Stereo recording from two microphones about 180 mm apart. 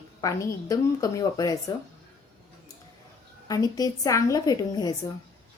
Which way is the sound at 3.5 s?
20° left (ahead or behind).